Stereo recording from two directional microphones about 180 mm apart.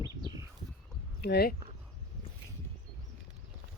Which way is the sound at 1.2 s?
60° left (ahead or behind).